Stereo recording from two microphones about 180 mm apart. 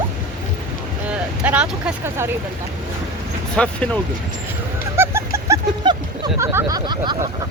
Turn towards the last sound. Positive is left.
turn(degrees=-25)  # may be behind; listen again after turning